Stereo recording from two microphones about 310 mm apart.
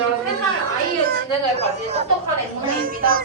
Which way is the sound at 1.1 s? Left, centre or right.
Right.